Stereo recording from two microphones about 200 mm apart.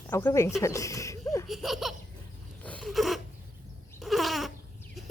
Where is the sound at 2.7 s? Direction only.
Centre (ahead or behind).